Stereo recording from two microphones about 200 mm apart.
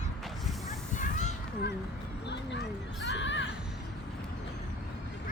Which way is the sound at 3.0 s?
65° left (ahead or behind).